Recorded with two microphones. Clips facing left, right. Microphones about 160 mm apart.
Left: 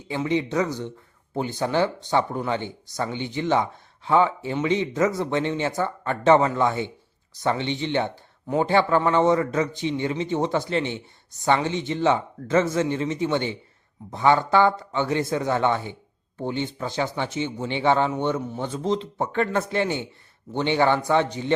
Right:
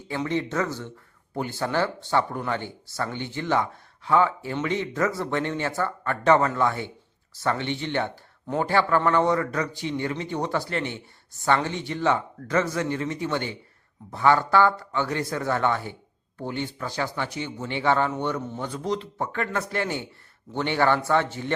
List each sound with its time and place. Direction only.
0.3 s a man's voice: 15° left (ahead or behind)